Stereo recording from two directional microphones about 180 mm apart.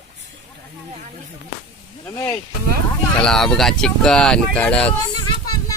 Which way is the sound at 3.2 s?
5° left (ahead or behind).